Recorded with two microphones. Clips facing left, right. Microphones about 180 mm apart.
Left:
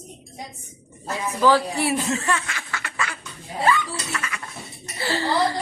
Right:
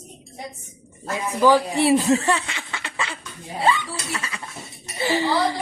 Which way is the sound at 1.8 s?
25° right (ahead or behind).